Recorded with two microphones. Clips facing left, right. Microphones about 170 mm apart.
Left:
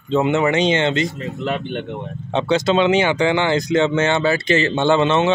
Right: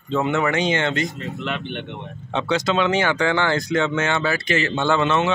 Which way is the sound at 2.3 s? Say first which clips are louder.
Left 4 dB; 30° left (ahead or behind).